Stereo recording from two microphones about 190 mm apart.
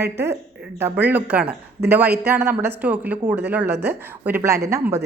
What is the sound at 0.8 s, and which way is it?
A woman's voice, 10° right (ahead or behind).